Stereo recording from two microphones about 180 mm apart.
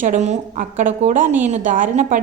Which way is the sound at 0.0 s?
45° right (ahead or behind).